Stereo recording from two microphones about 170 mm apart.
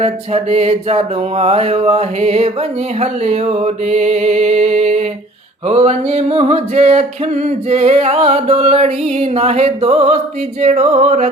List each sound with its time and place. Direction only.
0.0 s mantra: 35° right (ahead or behind)